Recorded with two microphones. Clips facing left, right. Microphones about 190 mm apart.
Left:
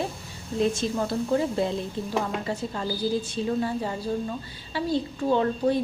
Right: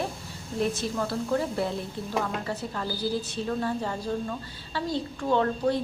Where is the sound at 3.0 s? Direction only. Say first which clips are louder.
Left 3 dB; 20° left (ahead or behind).